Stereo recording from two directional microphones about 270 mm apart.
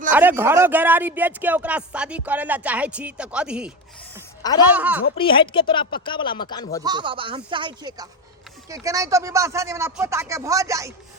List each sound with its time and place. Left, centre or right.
0.1 s speech: centre
4.7 s speech: centre
5.1 s speech: centre
6.8 s speech: centre